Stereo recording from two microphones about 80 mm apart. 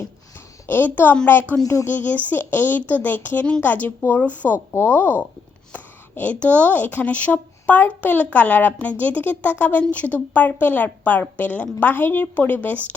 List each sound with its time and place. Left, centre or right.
0.7 s speech: left
1.6 s speech: left
1.9 s speech: left